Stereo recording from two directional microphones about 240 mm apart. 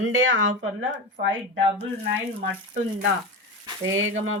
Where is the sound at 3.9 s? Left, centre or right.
Right.